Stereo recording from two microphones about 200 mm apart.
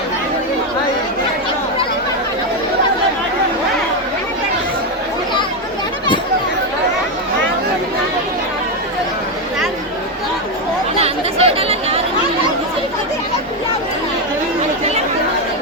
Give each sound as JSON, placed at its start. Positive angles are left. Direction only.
{"t": 11.0, "sound": "chatter", "side_deg": -30}